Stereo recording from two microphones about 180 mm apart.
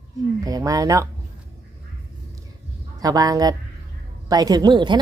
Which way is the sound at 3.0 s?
20° right (ahead or behind).